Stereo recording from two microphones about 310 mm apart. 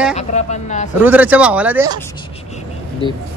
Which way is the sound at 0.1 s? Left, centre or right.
Left.